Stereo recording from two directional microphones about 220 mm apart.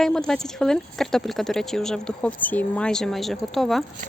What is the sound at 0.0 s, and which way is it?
Speech, centre (ahead or behind).